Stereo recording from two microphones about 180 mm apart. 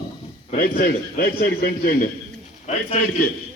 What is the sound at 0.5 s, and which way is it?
A man's voice, 55° left (ahead or behind).